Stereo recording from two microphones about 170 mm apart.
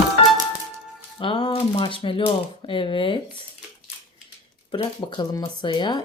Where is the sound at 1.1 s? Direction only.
30° left (ahead or behind).